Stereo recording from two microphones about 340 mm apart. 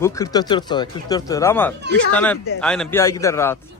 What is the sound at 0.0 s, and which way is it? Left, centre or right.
Speech, centre.